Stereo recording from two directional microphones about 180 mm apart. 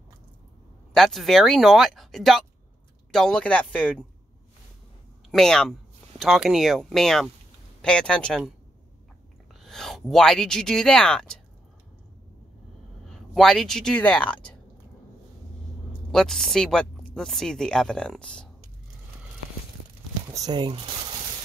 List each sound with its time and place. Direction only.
0.9 s speech: centre (ahead or behind)
5.3 s speech: 5° left (ahead or behind)
9.6 s speech: centre (ahead or behind)
13.3 s speech: centre (ahead or behind)
16.1 s speech: centre (ahead or behind)
20.2 s speech: 20° right (ahead or behind)